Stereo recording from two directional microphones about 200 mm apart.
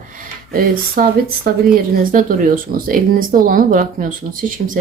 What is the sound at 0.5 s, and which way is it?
Speech, 45° right (ahead or behind).